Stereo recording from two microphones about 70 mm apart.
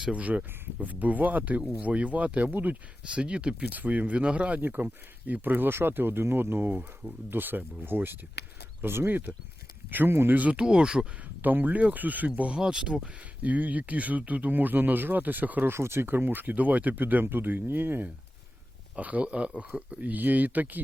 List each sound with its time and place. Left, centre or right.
0.0 s speech: right
11.4 s speech: right
12.5 s speech: centre
13.4 s speech: right
15.7 s speech: right
18.9 s speech: right